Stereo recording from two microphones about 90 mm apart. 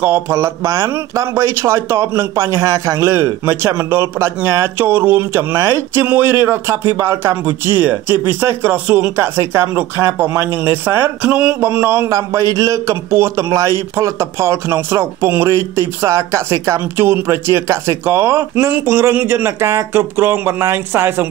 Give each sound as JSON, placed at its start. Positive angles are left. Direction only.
{"t": 0.0, "sound": "a man's voice", "side_deg": -25}
{"t": 12.1, "sound": "a man's voice", "side_deg": -35}